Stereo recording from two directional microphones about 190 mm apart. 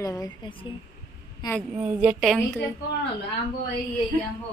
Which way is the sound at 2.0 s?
5° right (ahead or behind).